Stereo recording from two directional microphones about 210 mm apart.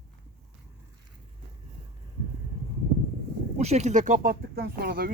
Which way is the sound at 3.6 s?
30° right (ahead or behind).